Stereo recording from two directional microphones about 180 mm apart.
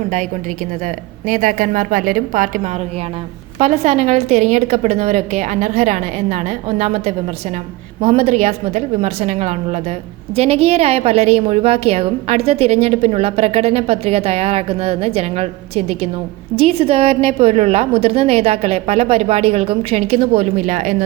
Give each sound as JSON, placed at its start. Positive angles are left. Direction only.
{"t": 1.3, "sound": "a woman's voice", "side_deg": -45}
{"t": 3.6, "sound": "a woman's voice", "side_deg": -35}